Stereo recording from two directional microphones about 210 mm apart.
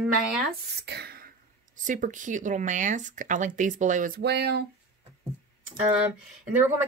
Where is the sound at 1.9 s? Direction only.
40° right (ahead or behind).